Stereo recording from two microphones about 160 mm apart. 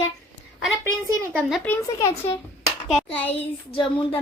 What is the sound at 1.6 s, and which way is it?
Speech, 20° left (ahead or behind).